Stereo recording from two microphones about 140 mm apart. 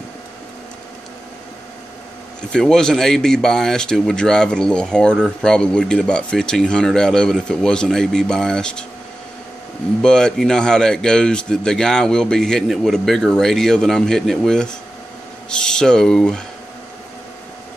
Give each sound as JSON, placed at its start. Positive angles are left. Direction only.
{"t": 2.5, "sound": "speech", "side_deg": 5}
{"t": 10.0, "sound": "speech", "side_deg": 5}